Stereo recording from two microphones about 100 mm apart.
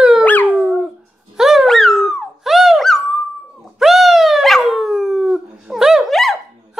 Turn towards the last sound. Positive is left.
turn(degrees=0)  # may be behind; listen again after turning